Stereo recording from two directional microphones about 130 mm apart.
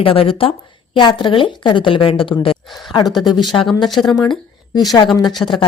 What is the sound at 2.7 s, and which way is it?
Speech, centre (ahead or behind).